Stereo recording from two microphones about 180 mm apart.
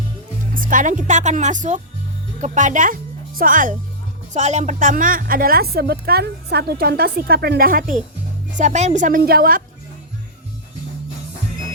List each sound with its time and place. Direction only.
0.5 s a woman's voice: 50° right (ahead or behind)